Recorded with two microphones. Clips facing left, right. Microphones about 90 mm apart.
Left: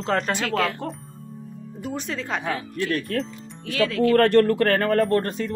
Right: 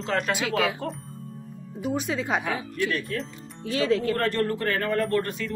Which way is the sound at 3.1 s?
60° left (ahead or behind).